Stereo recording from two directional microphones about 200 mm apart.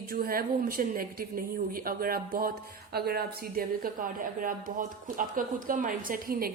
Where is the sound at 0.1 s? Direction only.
45° right (ahead or behind).